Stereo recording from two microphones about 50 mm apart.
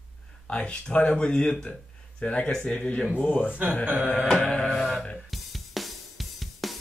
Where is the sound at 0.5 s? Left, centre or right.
Left.